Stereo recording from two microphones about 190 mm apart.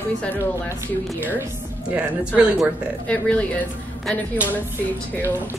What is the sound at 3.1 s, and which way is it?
Speech, 5° left (ahead or behind).